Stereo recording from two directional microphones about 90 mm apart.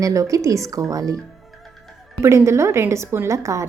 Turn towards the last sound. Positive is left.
turn(degrees=-35)  # may be behind; listen again after turning